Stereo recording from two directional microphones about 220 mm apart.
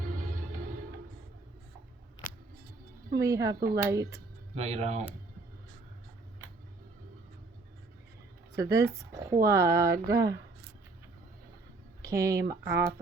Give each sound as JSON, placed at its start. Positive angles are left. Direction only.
{"t": 3.2, "sound": "speech", "side_deg": -15}
{"t": 4.5, "sound": "speech", "side_deg": -30}
{"t": 8.5, "sound": "speech", "side_deg": -15}
{"t": 12.0, "sound": "speech", "side_deg": -15}